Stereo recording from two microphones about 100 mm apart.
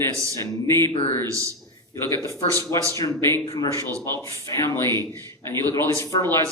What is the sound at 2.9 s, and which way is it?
A man's voice, 30° left (ahead or behind).